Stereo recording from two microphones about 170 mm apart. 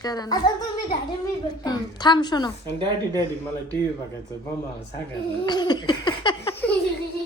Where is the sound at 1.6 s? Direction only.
25° left (ahead or behind).